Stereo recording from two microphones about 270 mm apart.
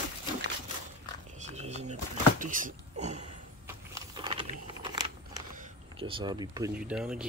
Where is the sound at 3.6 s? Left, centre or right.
Centre.